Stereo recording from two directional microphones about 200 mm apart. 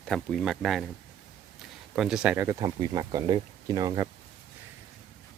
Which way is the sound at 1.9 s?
Centre (ahead or behind).